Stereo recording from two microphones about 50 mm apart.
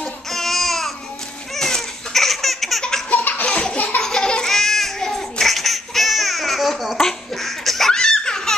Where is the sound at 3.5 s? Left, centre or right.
Centre.